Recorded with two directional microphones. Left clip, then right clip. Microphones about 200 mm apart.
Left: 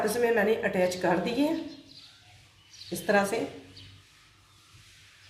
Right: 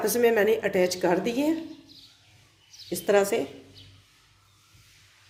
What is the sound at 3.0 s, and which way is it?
Speech, 45° right (ahead or behind).